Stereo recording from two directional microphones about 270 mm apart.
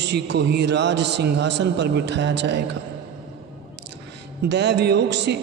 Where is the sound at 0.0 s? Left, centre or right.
Right.